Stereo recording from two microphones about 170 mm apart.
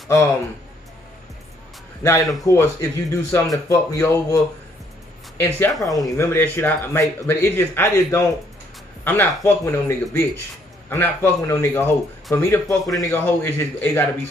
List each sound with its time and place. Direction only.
2.4 s speech: 15° left (ahead or behind)
5.4 s speech: 15° left (ahead or behind)